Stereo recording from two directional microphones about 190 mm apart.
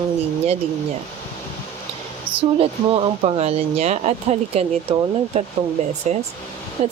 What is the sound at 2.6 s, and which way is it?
Speech, 30° right (ahead or behind).